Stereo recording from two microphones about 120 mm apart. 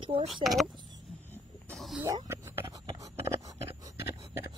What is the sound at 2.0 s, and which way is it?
Whispering, 20° right (ahead or behind).